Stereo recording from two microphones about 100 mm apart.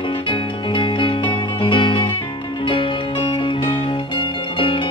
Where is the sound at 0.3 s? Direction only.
55° left (ahead or behind).